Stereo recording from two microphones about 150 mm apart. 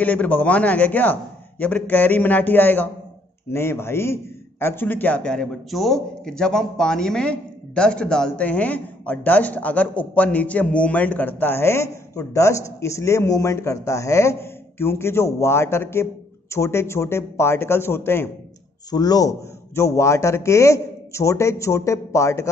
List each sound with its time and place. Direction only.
0.0 s a man's voice: 10° left (ahead or behind)
18.9 s a man's voice: 25° left (ahead or behind)